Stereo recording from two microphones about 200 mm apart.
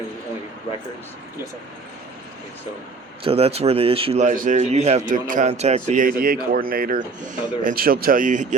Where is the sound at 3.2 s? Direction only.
30° right (ahead or behind).